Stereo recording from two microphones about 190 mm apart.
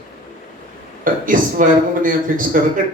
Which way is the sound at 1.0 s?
45° right (ahead or behind).